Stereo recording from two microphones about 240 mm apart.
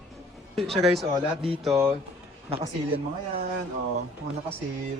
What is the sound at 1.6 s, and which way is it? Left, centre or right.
Speech, centre.